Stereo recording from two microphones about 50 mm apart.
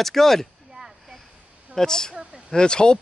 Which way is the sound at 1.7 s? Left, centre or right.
Centre.